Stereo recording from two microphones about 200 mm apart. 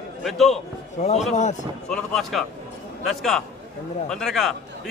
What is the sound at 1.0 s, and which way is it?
Speech, 35° left (ahead or behind).